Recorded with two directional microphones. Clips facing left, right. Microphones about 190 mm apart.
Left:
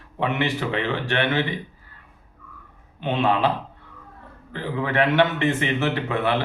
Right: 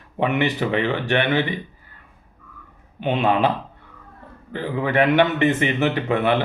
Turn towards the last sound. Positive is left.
turn(degrees=-20)  # may be behind; listen again after turning